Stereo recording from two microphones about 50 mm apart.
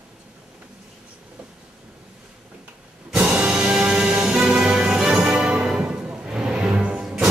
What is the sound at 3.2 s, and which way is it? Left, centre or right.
Music, right.